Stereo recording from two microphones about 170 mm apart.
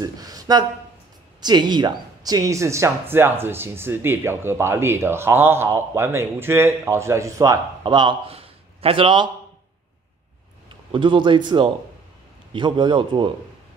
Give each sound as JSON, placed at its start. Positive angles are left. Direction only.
{"t": 0.0, "sound": "a sound", "side_deg": -20}
{"t": 1.4, "sound": "speech", "side_deg": -25}
{"t": 10.9, "sound": "speech", "side_deg": -30}